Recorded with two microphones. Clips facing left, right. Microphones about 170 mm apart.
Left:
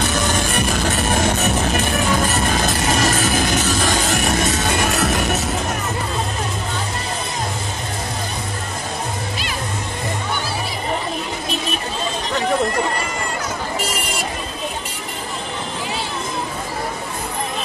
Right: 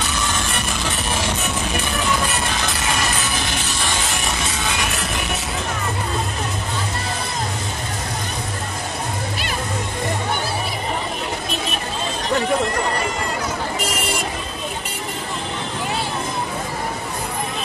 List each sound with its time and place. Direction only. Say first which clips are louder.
0.8 s music: left 4 dB; 45° left (ahead or behind)